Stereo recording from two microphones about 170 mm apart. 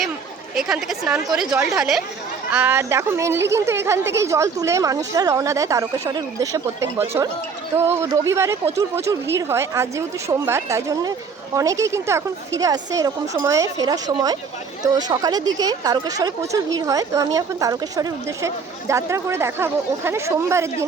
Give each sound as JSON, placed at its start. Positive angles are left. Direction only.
{"t": 0.5, "sound": "a woman's voice", "side_deg": 0}